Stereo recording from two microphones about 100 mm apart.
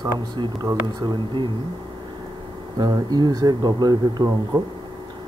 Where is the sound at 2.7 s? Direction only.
40° right (ahead or behind).